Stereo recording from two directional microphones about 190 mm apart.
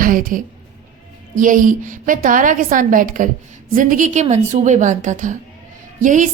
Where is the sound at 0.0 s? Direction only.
45° right (ahead or behind).